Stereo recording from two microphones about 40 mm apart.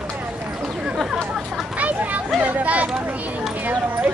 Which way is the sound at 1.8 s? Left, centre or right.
Right.